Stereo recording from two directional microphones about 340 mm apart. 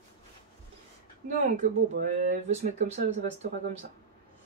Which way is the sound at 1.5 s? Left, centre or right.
Right.